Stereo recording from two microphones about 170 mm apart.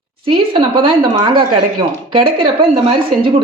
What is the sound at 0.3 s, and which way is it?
A woman's voice, 30° right (ahead or behind).